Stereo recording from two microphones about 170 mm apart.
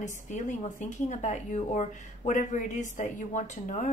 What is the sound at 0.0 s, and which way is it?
A woman's voice, 45° left (ahead or behind).